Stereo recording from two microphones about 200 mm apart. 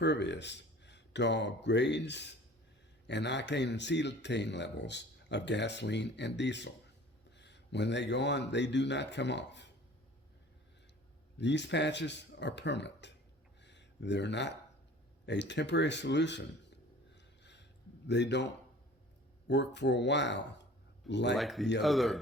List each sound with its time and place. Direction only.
0.0 s speech: 60° left (ahead or behind)
11.3 s speech: 60° left (ahead or behind)
13.6 s a sound: 60° left (ahead or behind)
15.3 s speech: 60° left (ahead or behind)
17.4 s a sound: 60° left (ahead or behind)
18.1 s speech: 60° left (ahead or behind)
21.3 s speech: centre (ahead or behind)